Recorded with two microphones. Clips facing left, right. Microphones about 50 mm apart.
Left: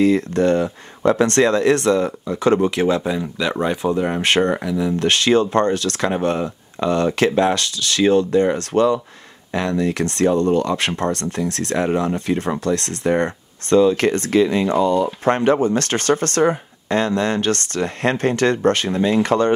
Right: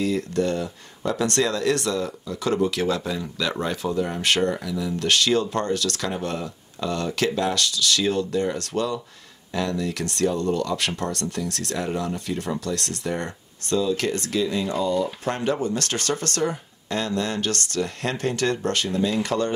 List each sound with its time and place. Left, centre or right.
0.0 s speech: left